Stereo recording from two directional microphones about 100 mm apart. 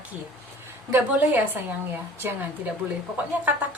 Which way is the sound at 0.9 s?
20° right (ahead or behind).